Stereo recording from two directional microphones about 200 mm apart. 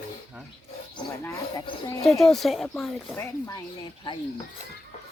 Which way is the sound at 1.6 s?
25° left (ahead or behind).